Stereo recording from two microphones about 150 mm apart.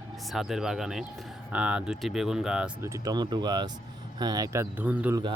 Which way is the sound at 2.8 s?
20° right (ahead or behind).